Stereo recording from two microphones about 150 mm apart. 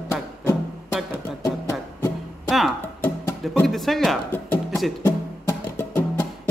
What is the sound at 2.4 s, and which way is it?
Music, centre (ahead or behind).